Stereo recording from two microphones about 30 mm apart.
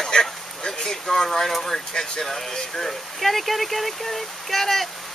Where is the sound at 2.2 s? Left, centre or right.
Centre.